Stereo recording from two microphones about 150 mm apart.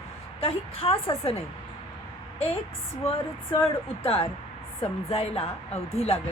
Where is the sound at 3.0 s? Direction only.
40° left (ahead or behind).